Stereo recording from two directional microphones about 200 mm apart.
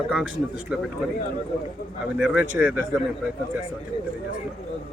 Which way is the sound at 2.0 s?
5° right (ahead or behind).